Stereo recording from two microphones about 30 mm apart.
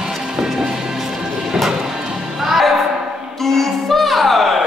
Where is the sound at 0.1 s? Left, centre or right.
Centre.